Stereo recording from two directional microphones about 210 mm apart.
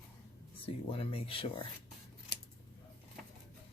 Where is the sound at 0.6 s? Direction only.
25° left (ahead or behind).